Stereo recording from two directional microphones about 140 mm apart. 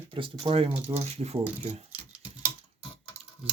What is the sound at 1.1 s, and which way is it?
Speech, 45° right (ahead or behind).